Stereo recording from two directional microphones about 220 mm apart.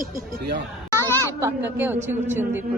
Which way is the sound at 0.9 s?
10° left (ahead or behind).